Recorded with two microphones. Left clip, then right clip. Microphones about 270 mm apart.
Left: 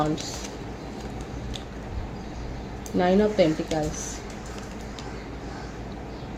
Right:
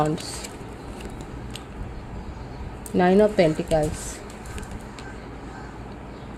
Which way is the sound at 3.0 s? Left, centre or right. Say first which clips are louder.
Right 3 dB; right.